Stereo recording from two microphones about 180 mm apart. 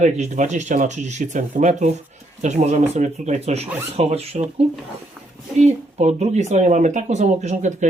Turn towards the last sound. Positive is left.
turn(degrees=-40)  # may be behind; listen again after turning